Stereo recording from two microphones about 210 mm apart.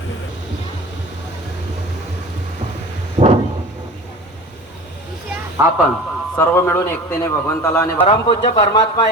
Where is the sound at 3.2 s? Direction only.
30° right (ahead or behind).